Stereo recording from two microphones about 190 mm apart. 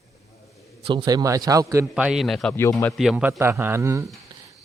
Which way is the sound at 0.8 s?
20° right (ahead or behind).